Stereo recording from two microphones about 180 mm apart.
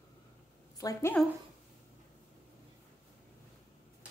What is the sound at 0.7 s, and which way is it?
Speech, 20° left (ahead or behind).